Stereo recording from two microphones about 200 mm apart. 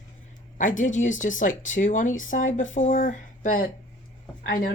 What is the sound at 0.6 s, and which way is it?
Speech, 40° left (ahead or behind).